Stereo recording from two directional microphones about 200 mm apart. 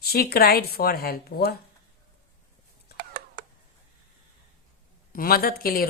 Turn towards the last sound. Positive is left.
turn(degrees=45)  # may be behind; listen again after turning